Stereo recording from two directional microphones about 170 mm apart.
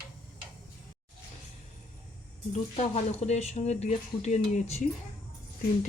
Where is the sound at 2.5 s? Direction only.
40° left (ahead or behind).